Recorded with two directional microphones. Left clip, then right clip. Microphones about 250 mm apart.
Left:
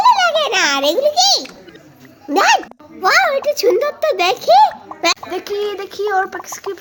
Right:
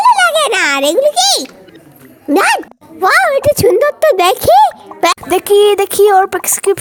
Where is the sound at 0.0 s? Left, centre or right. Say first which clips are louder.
Right 3 dB; right.